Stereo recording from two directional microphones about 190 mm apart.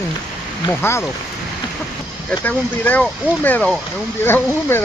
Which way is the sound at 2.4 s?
10° left (ahead or behind).